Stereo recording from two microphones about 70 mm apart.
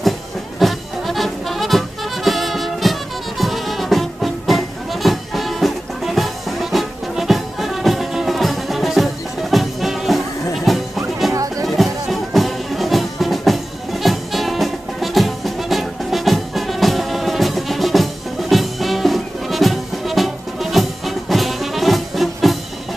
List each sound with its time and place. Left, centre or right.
0.6 s music: centre
11.3 s music: right
11.6 s music: centre